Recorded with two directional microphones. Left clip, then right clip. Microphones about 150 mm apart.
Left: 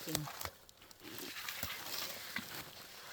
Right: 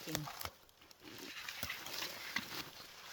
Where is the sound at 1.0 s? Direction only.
45° left (ahead or behind).